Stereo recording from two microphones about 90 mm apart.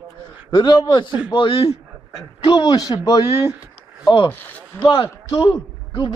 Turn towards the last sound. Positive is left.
turn(degrees=60)  # may be behind; listen again after turning